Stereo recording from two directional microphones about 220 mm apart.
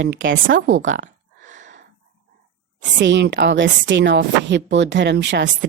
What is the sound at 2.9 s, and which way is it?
Speech, 55° right (ahead or behind).